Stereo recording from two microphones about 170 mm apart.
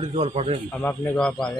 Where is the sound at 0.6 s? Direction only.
10° left (ahead or behind).